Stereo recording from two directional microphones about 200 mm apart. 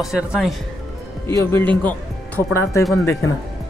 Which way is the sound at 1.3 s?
10° left (ahead or behind).